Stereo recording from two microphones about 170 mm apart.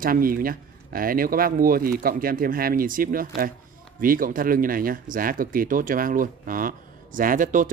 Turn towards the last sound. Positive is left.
turn(degrees=-50)  # may be behind; listen again after turning